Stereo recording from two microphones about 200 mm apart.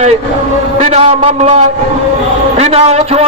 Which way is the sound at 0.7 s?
35° right (ahead or behind).